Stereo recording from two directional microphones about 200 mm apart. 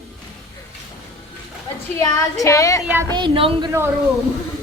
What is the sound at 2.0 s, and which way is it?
Speech, 15° left (ahead or behind).